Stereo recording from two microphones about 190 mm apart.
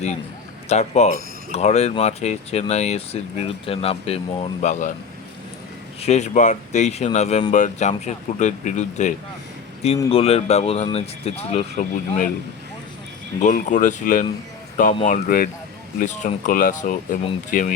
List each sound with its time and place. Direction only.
0.7 s speech: 35° left (ahead or behind)
6.0 s speech: 35° left (ahead or behind)
13.4 s speech: 40° left (ahead or behind)